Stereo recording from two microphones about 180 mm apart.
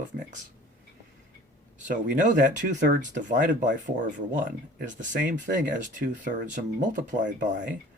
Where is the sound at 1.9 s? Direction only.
45° right (ahead or behind).